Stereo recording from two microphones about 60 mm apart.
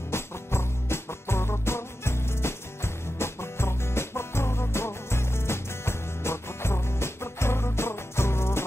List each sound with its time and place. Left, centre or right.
0.1 s music: left